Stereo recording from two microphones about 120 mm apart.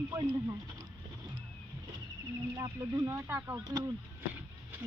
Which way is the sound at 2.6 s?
35° right (ahead or behind).